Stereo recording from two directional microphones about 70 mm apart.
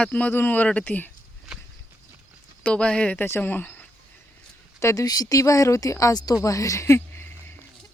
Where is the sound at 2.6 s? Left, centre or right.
Centre.